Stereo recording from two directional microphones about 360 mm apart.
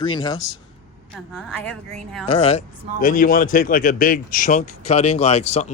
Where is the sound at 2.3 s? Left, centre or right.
Centre.